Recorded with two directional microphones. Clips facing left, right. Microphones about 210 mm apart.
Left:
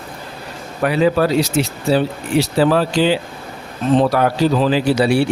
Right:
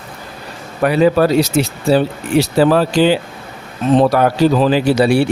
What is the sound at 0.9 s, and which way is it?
Speech, 45° right (ahead or behind).